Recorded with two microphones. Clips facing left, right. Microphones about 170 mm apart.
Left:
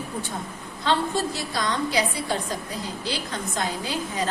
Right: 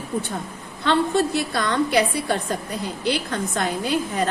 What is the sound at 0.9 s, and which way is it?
A woman's voice, 60° right (ahead or behind).